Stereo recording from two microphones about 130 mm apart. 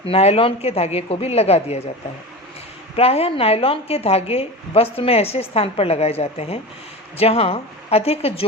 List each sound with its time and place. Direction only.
0.1 s a woman's voice: 50° left (ahead or behind)
2.9 s a woman's voice: 50° left (ahead or behind)